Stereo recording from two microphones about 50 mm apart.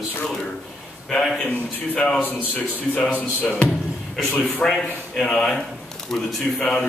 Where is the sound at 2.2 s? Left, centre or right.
Left.